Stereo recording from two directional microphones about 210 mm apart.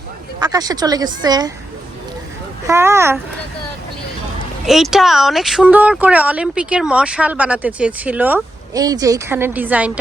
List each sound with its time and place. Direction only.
0.3 s speech: 20° right (ahead or behind)
2.6 s speech: 15° right (ahead or behind)
4.6 s speech: centre (ahead or behind)